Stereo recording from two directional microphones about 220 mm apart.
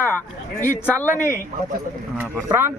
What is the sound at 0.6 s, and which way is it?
Speech, 10° left (ahead or behind).